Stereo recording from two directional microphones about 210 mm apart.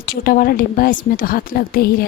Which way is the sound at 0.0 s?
45° left (ahead or behind).